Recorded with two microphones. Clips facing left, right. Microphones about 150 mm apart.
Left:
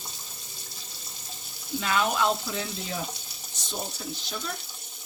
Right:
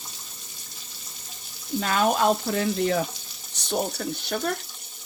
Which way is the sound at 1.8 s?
45° right (ahead or behind).